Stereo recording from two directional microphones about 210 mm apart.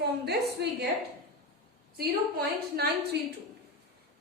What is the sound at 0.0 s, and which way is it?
Speech, 50° right (ahead or behind).